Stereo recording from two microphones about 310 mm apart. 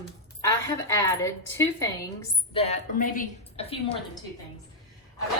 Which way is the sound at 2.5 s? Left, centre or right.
Left.